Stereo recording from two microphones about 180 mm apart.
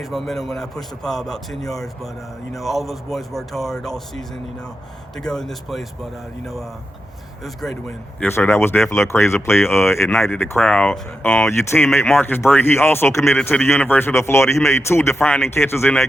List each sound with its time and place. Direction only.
0.0 s a man's voice: centre (ahead or behind)
7.4 s a man's voice: centre (ahead or behind)
8.2 s speech: 15° left (ahead or behind)